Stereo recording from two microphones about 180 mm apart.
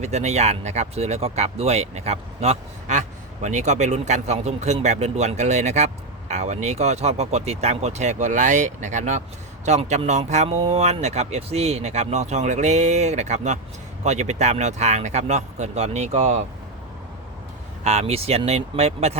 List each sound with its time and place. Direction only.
0.0 s speech: 40° right (ahead or behind)
17.8 s speech: 35° right (ahead or behind)